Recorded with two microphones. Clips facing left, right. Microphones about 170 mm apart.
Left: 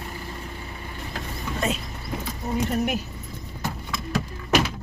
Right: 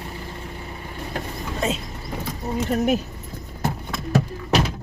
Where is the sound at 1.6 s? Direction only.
25° right (ahead or behind).